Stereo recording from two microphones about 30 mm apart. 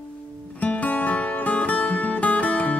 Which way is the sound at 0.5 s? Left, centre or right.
Left.